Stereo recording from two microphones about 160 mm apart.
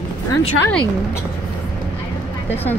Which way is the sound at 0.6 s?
5° left (ahead or behind).